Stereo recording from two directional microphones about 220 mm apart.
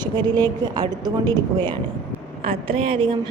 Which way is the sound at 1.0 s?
15° right (ahead or behind).